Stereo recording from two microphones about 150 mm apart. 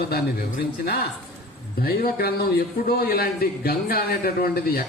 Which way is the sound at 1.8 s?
90° left.